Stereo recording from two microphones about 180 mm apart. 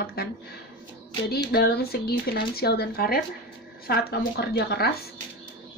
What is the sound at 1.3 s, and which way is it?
Speech, 60° left (ahead or behind).